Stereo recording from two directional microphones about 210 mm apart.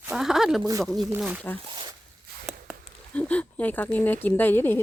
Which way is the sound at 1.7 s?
20° right (ahead or behind).